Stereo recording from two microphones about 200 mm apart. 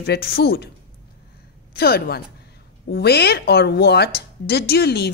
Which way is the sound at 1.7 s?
50° left (ahead or behind).